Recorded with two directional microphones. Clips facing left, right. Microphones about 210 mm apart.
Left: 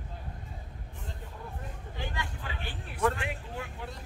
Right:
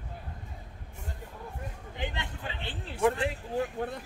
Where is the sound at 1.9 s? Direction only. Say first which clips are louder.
Right 2 dB; 20° right (ahead or behind).